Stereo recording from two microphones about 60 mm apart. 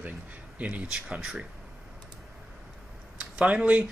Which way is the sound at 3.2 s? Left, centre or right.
Centre.